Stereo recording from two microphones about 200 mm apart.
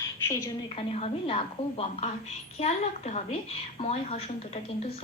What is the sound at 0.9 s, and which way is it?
A woman's voice, 30° left (ahead or behind).